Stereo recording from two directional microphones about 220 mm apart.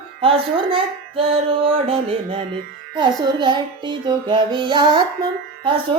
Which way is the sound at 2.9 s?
20° right (ahead or behind).